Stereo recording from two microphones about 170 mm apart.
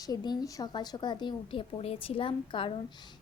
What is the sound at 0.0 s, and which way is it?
A woman's voice, 25° left (ahead or behind).